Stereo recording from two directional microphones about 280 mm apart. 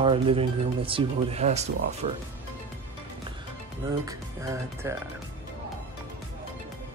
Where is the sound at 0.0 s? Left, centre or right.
Centre.